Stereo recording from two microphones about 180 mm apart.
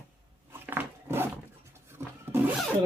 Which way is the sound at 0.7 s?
10° right (ahead or behind).